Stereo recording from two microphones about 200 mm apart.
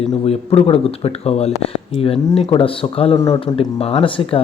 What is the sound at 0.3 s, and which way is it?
Speech, 30° left (ahead or behind).